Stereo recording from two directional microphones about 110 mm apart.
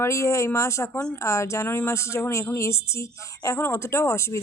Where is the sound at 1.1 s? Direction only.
25° left (ahead or behind).